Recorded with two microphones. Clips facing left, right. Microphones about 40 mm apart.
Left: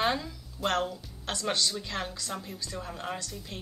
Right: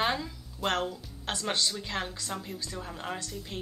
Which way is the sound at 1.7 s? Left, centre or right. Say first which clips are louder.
Even; centre.